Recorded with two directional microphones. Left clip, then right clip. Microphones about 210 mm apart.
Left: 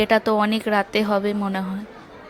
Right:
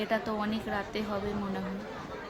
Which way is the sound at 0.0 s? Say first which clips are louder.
Left 13 dB; 45° left (ahead or behind).